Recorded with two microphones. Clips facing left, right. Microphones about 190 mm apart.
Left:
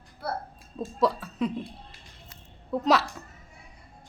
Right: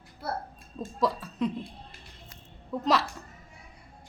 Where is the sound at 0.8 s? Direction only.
Centre (ahead or behind).